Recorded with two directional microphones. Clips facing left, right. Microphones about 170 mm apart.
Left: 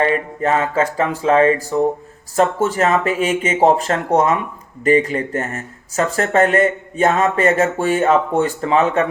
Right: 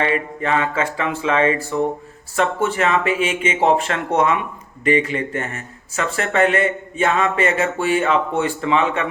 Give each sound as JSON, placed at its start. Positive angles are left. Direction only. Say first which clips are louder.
{"t": 0.0, "sound": "speech", "louder": "left 3 dB", "side_deg": 40}